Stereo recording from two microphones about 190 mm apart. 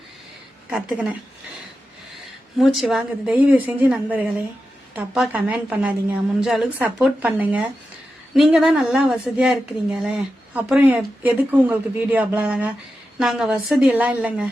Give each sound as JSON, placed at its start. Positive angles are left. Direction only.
{"t": 0.7, "sound": "a woman's voice", "side_deg": -5}
{"t": 2.6, "sound": "a woman's voice", "side_deg": 0}